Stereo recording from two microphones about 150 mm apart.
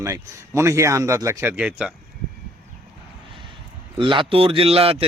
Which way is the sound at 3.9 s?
35° right (ahead or behind).